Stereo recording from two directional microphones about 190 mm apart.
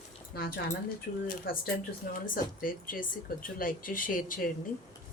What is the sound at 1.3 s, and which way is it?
Speech, 45° left (ahead or behind).